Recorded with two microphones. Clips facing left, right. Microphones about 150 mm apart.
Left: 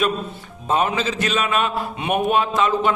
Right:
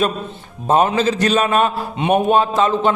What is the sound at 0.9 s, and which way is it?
Speech, 35° right (ahead or behind).